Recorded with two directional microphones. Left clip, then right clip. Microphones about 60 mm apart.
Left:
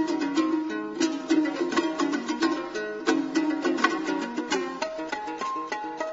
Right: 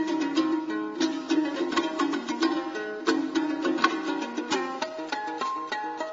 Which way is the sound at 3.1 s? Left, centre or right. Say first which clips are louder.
Left 1 dB; right.